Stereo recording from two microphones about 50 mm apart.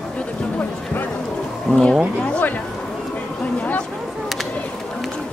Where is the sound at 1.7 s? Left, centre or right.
Left.